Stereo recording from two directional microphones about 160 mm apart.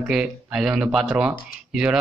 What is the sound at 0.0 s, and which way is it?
A man's voice, 5° right (ahead or behind).